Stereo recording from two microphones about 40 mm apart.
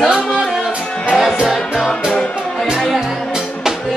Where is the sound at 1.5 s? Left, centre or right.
Centre.